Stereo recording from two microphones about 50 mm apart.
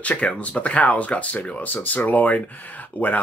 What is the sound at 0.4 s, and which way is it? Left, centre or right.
Speech, left.